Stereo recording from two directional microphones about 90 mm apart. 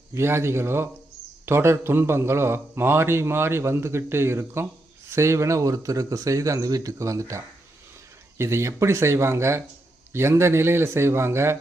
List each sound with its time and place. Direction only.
0.1 s a man's voice: 30° right (ahead or behind)